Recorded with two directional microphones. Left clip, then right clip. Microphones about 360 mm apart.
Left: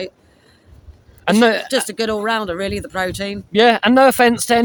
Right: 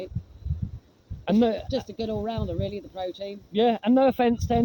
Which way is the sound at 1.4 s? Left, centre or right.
Right.